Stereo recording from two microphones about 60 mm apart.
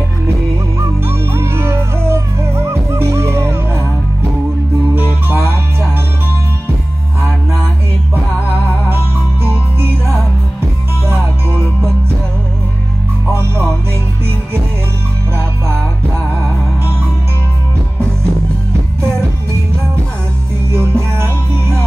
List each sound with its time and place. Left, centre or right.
0.7 s music: right
4.9 s music: right
8.8 s music: right
13.3 s music: right
20.7 s music: right